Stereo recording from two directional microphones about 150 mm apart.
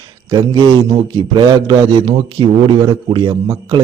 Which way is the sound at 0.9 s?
30° right (ahead or behind).